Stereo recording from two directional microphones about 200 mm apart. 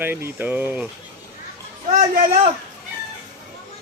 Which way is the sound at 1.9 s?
35° right (ahead or behind).